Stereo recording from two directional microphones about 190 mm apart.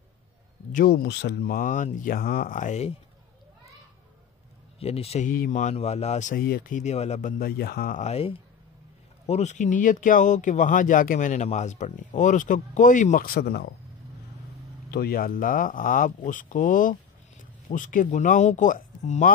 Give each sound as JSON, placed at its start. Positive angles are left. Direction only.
{"t": 0.7, "sound": "speech", "side_deg": 50}
{"t": 4.7, "sound": "speech", "side_deg": 30}
{"t": 5.3, "sound": "speech", "side_deg": 45}
{"t": 14.9, "sound": "speech", "side_deg": 55}